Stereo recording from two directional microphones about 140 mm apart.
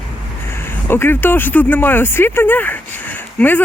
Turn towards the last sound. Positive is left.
turn(degrees=10)  # may be behind; listen again after turning